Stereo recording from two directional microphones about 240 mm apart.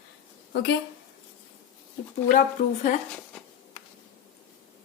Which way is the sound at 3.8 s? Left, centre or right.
Left.